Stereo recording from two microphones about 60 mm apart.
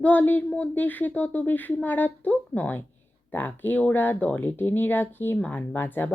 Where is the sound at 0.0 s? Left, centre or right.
Left.